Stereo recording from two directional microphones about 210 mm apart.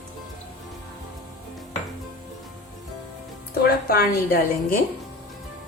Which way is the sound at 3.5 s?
45° left (ahead or behind).